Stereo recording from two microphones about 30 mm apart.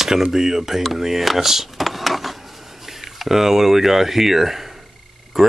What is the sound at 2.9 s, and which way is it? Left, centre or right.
Speech, centre.